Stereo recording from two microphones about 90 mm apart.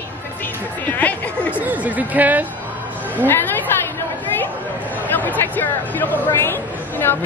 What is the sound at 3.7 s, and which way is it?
Chatter, 25° left (ahead or behind).